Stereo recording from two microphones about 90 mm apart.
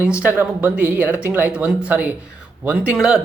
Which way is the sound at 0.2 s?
20° right (ahead or behind).